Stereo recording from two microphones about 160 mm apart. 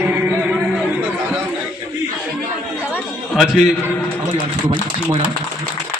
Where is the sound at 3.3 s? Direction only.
Centre (ahead or behind).